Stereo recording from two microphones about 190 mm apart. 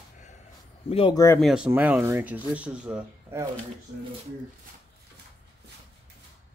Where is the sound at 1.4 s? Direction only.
5° right (ahead or behind).